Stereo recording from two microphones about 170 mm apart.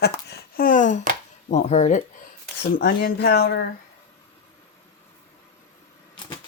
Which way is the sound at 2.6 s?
65° left (ahead or behind).